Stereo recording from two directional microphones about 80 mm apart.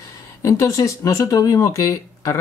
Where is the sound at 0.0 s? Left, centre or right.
Left.